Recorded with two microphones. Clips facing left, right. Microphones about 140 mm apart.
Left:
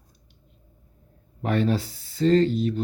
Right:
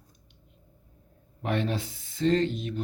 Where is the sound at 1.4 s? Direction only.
40° left (ahead or behind).